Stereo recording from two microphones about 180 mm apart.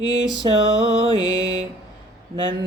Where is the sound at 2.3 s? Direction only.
25° right (ahead or behind).